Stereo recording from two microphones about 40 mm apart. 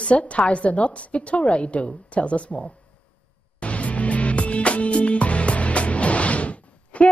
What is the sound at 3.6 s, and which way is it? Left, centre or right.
Music, left.